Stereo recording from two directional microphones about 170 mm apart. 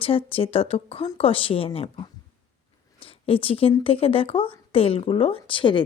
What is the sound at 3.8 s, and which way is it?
A woman's voice, 35° left (ahead or behind).